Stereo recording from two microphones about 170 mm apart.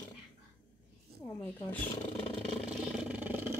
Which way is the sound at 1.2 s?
15° left (ahead or behind).